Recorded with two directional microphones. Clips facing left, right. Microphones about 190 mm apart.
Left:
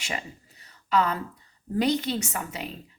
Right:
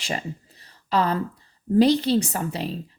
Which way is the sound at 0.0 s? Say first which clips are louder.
Right 5 dB; 35° right (ahead or behind).